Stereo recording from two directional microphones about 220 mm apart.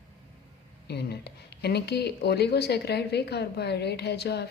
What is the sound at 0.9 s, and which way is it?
Speech, 50° left (ahead or behind).